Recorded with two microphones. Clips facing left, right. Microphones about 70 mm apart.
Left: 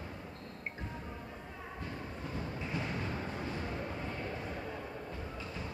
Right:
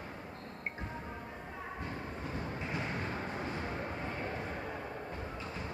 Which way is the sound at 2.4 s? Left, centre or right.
Right.